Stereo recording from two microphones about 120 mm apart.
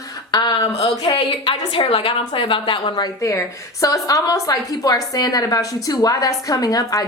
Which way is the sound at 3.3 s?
25° left (ahead or behind).